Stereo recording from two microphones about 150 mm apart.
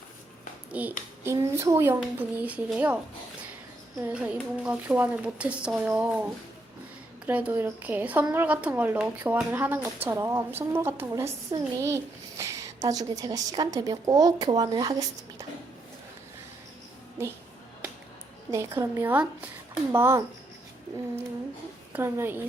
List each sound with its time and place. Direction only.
0.7 s a child's voice: 10° right (ahead or behind)
4.0 s a woman's voice: 10° right (ahead or behind)
7.3 s a woman's voice: 10° right (ahead or behind)
18.5 s a woman's voice: 20° right (ahead or behind)
21.9 s a woman's voice: 15° right (ahead or behind)